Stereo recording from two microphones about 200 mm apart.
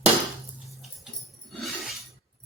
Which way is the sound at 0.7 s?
Centre (ahead or behind).